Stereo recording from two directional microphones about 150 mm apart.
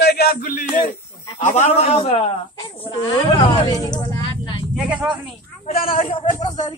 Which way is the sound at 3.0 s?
25° left (ahead or behind).